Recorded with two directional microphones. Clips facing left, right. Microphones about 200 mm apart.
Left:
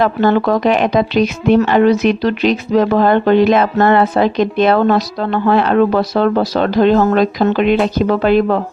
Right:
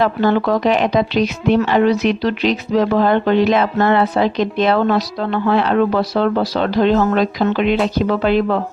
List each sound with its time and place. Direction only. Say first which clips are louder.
0.0 s speech: left 2 dB; 50° left (ahead or behind)